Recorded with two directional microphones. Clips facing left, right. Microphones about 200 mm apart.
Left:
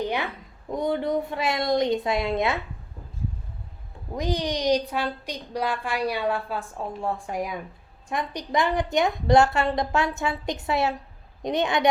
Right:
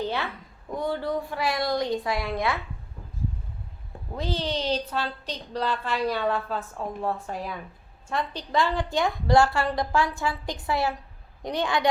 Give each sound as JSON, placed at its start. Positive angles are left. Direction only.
{"t": 0.0, "sound": "a woman's voice", "side_deg": 15}
{"t": 4.1, "sound": "a woman's voice", "side_deg": 15}